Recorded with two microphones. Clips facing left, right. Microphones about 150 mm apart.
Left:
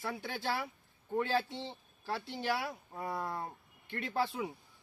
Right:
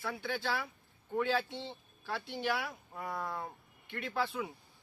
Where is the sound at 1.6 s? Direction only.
35° left (ahead or behind).